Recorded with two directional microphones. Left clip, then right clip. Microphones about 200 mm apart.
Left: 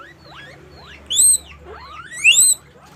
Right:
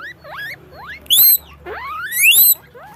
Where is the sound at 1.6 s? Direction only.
45° right (ahead or behind).